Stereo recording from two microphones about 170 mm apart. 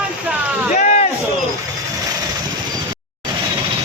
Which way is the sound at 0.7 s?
45° left (ahead or behind).